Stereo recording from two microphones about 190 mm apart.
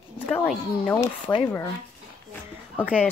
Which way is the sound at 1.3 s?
10° left (ahead or behind).